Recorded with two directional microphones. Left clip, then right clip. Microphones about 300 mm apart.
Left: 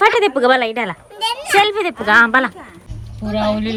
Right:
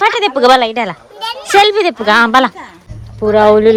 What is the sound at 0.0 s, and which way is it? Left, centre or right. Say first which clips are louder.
A woman's voice: right 3 dB; centre.